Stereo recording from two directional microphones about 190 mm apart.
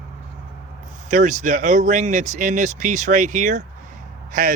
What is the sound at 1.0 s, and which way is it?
A man's voice, 40° right (ahead or behind).